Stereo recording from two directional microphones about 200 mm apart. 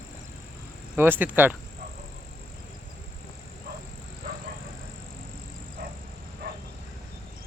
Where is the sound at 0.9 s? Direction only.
10° right (ahead or behind).